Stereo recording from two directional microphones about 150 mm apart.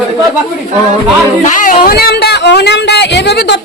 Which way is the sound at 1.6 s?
70° left (ahead or behind).